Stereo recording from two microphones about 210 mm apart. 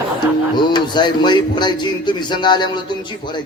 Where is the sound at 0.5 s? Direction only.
20° left (ahead or behind).